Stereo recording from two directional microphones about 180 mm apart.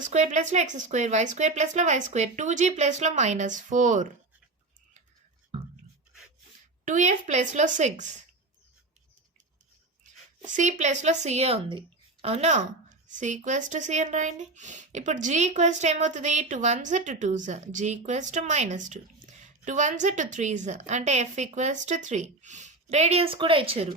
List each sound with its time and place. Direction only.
0.0 s speech: 45° right (ahead or behind)
5.5 s a sound: 35° right (ahead or behind)
6.8 s a woman's voice: 45° right (ahead or behind)
10.5 s speech: 40° right (ahead or behind)